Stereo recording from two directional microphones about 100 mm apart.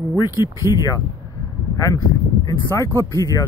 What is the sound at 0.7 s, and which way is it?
Speech, 35° left (ahead or behind).